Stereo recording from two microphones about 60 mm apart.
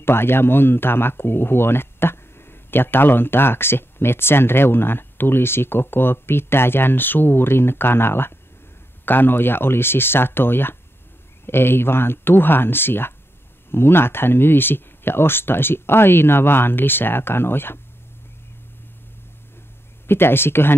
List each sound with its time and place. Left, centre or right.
0.0 s speech: left
20.1 s speech: left